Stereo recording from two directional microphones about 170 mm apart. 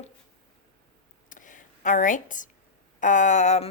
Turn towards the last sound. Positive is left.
turn(degrees=40)  # may be behind; listen again after turning